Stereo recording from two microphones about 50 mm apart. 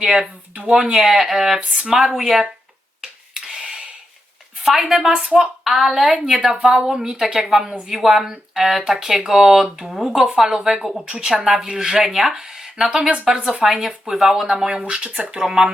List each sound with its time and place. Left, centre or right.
0.0 s a woman's voice: centre
3.0 s a sound: centre
4.6 s a woman's voice: centre
11.1 s a woman's voice: centre
15.4 s speech: centre